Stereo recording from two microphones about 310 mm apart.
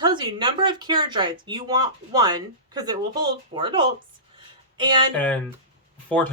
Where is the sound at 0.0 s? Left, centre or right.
Centre.